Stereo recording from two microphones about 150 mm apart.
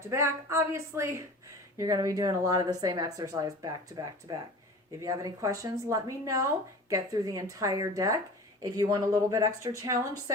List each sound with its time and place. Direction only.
0.1 s speech: 20° right (ahead or behind)